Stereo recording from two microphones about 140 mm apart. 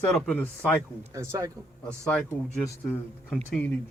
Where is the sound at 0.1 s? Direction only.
5° left (ahead or behind).